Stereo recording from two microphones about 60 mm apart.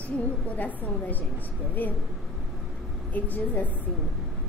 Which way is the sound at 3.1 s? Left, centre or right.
Left.